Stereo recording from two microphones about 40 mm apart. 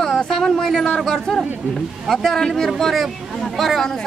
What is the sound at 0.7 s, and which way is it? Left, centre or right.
A man's voice, centre.